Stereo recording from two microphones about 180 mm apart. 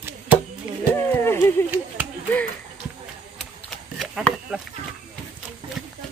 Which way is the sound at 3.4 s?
Centre (ahead or behind).